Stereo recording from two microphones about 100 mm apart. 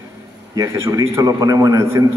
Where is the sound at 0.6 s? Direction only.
30° right (ahead or behind).